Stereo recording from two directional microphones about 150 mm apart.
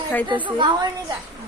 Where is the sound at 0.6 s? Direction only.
30° right (ahead or behind).